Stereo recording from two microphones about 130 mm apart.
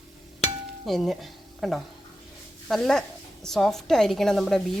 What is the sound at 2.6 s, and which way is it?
Dishes, centre (ahead or behind).